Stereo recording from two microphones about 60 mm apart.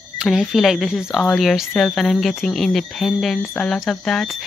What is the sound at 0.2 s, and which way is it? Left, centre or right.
Speech, centre.